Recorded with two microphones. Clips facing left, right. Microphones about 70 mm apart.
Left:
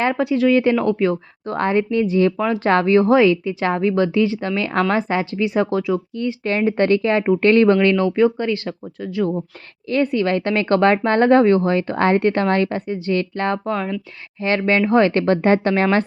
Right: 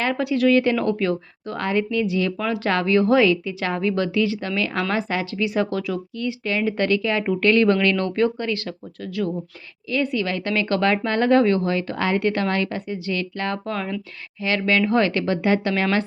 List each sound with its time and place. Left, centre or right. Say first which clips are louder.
0.0 s a woman's voice: left 3 dB; left
1.5 s a woman's voice: left 4 dB; left
6.2 s a woman's voice: left 3 dB; left
15.2 s speech: left 5 dB; left